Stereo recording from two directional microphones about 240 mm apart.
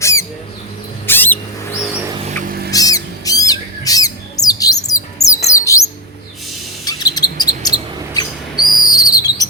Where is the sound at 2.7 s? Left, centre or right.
Centre.